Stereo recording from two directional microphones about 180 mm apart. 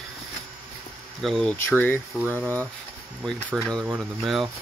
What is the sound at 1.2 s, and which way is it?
Speech, centre (ahead or behind).